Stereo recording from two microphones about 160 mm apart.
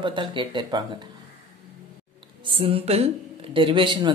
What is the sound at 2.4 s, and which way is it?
Speech, 35° right (ahead or behind).